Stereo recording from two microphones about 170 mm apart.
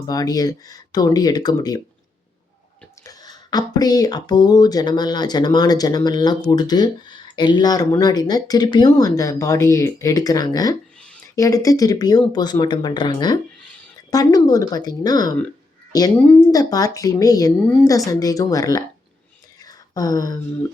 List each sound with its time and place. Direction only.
0.1 s speech: 20° left (ahead or behind)
3.0 s speech: 20° left (ahead or behind)
19.6 s a sound: 20° left (ahead or behind)